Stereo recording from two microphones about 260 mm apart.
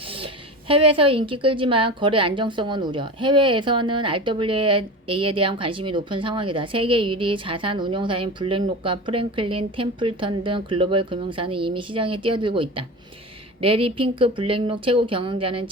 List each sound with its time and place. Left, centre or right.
0.7 s a woman's voice: right